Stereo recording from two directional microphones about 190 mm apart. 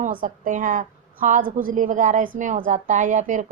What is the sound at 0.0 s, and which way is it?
A woman's voice, 45° right (ahead or behind).